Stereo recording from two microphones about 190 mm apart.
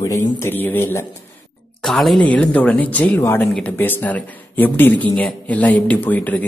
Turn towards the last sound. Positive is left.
turn(degrees=10)  # may be behind; listen again after turning